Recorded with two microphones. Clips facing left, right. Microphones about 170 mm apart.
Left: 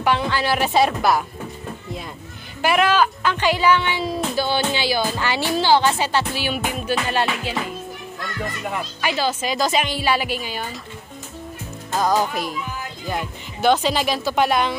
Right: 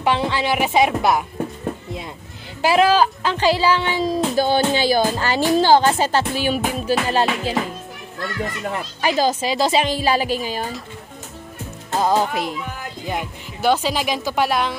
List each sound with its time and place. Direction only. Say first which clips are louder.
0.0 s speech: right 1 dB; 25° right (ahead or behind)
2.6 s a woman's voice: right 3 dB; 30° right (ahead or behind)
9.0 s a woman's voice: right 4 dB; 40° right (ahead or behind)
12.0 s speech: right 1 dB; 25° right (ahead or behind)
13.0 s a woman's voice: right 1 dB; 15° right (ahead or behind)